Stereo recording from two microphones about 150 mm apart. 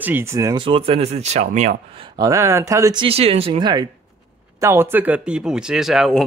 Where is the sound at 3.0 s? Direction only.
40° right (ahead or behind).